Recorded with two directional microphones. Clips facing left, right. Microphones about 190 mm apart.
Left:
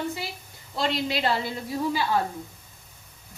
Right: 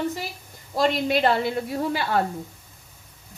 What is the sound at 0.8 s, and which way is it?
A woman's voice, 50° right (ahead or behind).